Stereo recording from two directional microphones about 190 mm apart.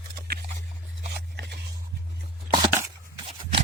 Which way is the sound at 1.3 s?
60° right (ahead or behind).